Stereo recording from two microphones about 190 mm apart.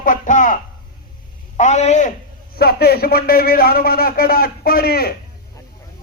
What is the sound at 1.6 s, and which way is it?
Speech, 35° left (ahead or behind).